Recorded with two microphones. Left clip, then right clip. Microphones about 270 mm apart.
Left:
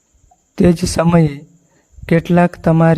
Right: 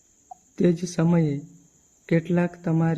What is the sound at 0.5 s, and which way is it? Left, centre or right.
Speech, left.